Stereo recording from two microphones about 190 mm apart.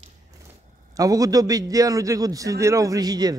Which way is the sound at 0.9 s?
20° right (ahead or behind).